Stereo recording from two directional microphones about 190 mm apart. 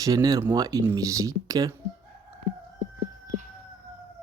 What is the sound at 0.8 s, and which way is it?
Speech, 15° right (ahead or behind).